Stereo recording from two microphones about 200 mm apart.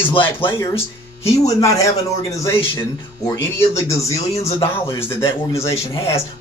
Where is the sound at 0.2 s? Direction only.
15° left (ahead or behind).